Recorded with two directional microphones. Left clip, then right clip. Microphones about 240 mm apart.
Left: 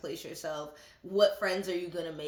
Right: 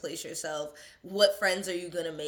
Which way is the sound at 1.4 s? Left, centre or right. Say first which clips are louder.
Right 3 dB; left.